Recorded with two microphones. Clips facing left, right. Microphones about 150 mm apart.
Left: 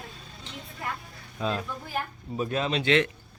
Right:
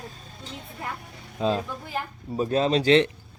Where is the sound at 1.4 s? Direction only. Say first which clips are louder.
Right 5 dB; 30° right (ahead or behind).